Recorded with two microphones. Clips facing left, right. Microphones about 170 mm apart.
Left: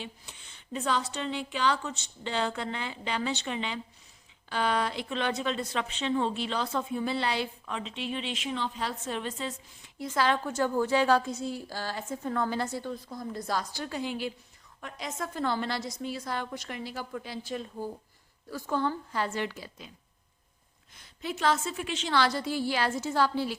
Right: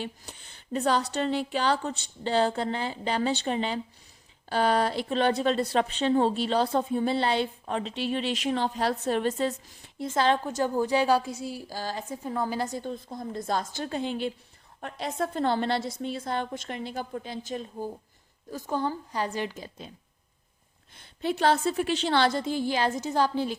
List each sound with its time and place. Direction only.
0.0 s a woman's voice: 40° right (ahead or behind)
10.0 s a woman's voice: 25° right (ahead or behind)
20.9 s a woman's voice: 30° right (ahead or behind)